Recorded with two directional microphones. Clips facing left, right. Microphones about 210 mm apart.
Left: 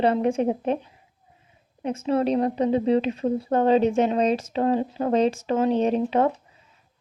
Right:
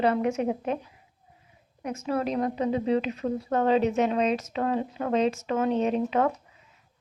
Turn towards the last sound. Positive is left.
turn(degrees=30)  # may be behind; listen again after turning